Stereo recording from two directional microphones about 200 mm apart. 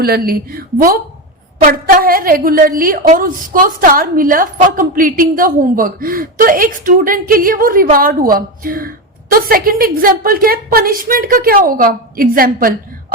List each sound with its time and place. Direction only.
0.0 s a woman's voice: 50° right (ahead or behind)